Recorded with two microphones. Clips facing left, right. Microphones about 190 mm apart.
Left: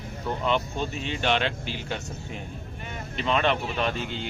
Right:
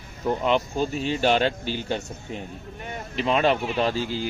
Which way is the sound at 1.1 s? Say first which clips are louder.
Right 4 dB; 35° right (ahead or behind).